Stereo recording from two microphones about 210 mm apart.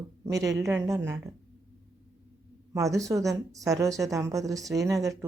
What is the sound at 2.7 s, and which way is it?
Speech, 15° right (ahead or behind).